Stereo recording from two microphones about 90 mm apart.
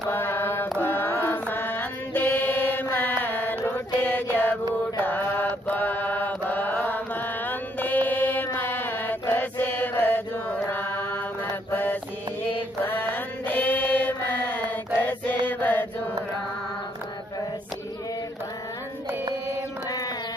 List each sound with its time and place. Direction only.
0.1 s mantra: 25° left (ahead or behind)
15.0 s chant: 20° left (ahead or behind)